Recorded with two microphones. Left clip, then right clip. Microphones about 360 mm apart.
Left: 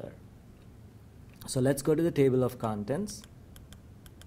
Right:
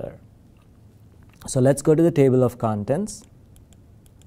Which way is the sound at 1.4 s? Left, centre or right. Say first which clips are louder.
Right 10 dB; right.